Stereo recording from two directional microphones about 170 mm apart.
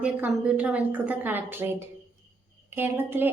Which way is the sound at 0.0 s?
5° right (ahead or behind).